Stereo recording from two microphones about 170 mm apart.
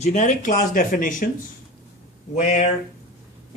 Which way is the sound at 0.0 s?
45° left (ahead or behind).